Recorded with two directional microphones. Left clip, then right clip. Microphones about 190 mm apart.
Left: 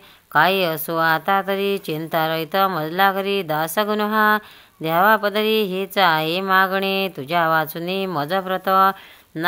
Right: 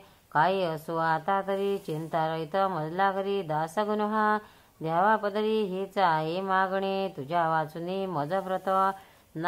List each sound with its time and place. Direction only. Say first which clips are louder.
0.3 s speech: left 8 dB; 25° left (ahead or behind)